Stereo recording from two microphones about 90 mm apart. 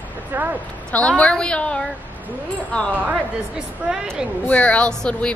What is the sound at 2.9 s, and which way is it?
Speech, 15° right (ahead or behind).